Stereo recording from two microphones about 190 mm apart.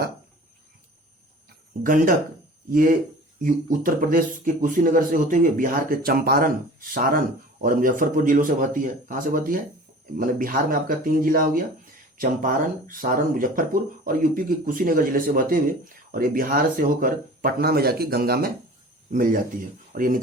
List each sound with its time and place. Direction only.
1.8 s speech: 45° right (ahead or behind)